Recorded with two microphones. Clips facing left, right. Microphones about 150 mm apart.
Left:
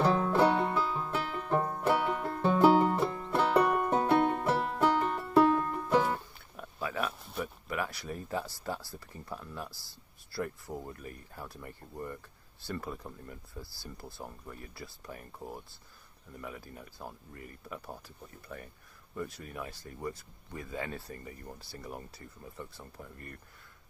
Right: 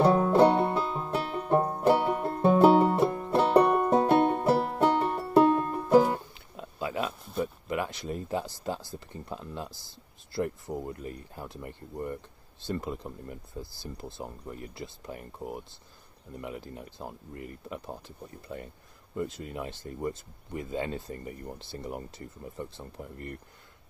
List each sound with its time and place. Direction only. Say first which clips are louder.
0.0 s music: right 5 dB; 30° right (ahead or behind)
6.1 s a sound: right 3 dB; 20° right (ahead or behind)
7.3 s speech: right 6 dB; 20° right (ahead or behind)